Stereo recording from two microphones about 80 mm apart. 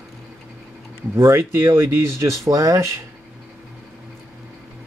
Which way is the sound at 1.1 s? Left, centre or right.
Right.